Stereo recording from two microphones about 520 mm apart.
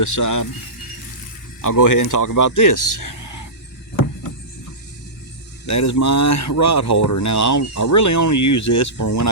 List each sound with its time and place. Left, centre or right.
0.0 s speech: left
1.6 s speech: left
5.6 s speech: left